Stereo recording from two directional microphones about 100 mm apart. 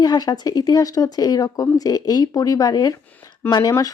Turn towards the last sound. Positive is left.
turn(degrees=40)  # may be behind; listen again after turning